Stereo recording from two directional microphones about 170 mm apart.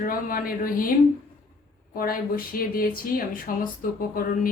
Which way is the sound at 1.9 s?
60° left (ahead or behind).